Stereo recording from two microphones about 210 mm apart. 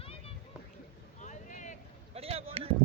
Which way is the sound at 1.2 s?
35° left (ahead or behind).